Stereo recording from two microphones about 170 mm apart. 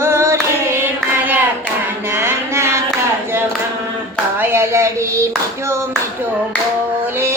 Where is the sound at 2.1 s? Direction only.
15° right (ahead or behind).